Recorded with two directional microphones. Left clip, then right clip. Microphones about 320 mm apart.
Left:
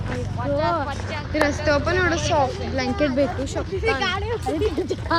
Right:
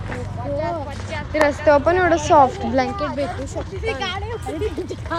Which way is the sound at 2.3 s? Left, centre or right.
Right.